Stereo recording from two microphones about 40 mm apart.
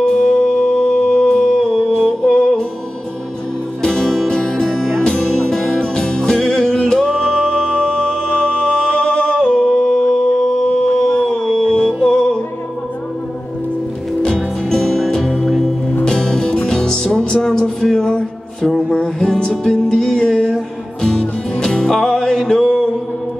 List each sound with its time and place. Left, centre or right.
0.0 s music: centre
3.8 s music: centre
8.4 s a sound: left
11.7 s music: centre
14.2 s music: centre
16.0 s music: centre